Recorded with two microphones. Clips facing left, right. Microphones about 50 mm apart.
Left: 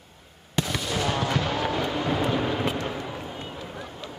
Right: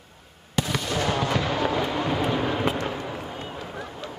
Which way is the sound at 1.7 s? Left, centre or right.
Right.